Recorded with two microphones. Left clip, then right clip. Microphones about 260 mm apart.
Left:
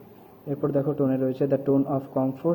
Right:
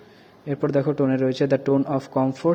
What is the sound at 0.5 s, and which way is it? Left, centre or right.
Speech, right.